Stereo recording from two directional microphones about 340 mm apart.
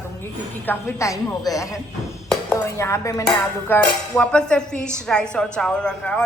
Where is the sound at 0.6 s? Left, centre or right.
Centre.